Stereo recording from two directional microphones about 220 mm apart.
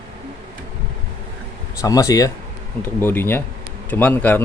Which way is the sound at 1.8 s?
15° left (ahead or behind).